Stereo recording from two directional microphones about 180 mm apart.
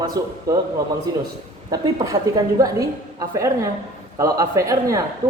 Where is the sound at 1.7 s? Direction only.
20° right (ahead or behind).